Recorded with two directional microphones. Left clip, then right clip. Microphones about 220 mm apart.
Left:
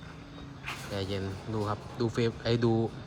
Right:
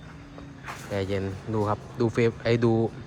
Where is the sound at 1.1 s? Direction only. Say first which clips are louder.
Right 6 dB; 5° left (ahead or behind).